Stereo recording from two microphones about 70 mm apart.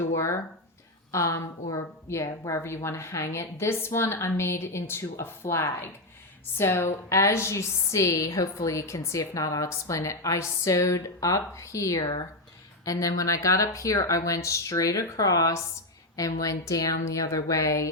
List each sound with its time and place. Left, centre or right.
1.1 s a woman's voice: left